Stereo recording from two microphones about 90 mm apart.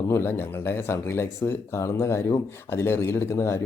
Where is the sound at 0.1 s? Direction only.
25° left (ahead or behind).